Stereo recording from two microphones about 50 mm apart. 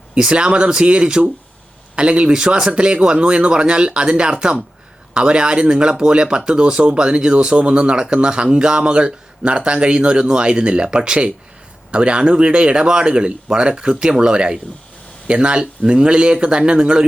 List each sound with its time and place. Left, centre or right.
0.1 s speech: centre